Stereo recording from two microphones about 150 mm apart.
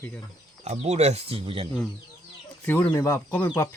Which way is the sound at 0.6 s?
45° right (ahead or behind).